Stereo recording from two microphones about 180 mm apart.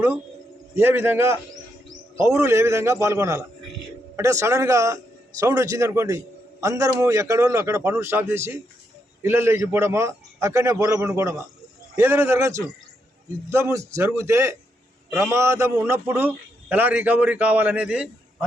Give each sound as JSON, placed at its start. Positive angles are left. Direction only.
{"t": 0.8, "sound": "a man's voice", "side_deg": -15}